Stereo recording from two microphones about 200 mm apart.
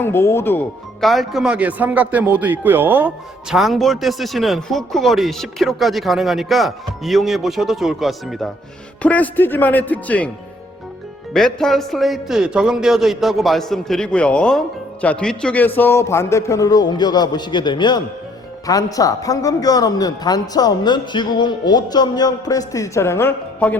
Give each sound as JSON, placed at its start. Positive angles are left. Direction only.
{"t": 0.0, "sound": "a man's voice", "side_deg": 10}
{"t": 1.0, "sound": "a man's voice", "side_deg": 0}
{"t": 11.3, "sound": "a man's voice", "side_deg": 0}